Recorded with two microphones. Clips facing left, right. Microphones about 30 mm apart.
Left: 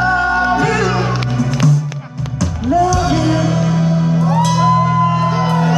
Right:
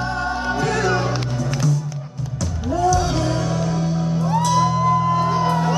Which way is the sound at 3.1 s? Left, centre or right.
Left.